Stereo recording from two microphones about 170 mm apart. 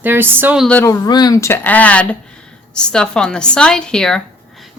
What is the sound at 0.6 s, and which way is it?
Speech, 10° left (ahead or behind).